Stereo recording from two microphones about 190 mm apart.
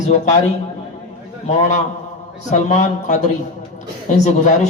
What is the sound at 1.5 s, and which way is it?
A man's voice, 40° left (ahead or behind).